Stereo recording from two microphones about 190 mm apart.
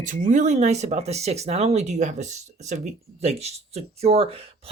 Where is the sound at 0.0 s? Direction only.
40° right (ahead or behind).